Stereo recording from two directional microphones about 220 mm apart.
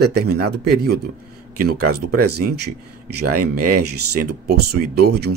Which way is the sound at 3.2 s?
90° right.